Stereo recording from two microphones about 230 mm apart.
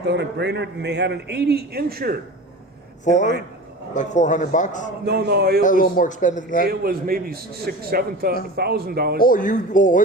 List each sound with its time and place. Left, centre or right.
0.0 s a man's voice: right
3.0 s speech: left
5.0 s a man's voice: right
5.6 s speech: left
6.7 s a man's voice: right
9.2 s speech: left